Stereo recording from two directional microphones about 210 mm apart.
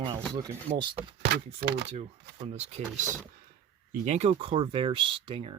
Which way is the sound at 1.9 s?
30° right (ahead or behind).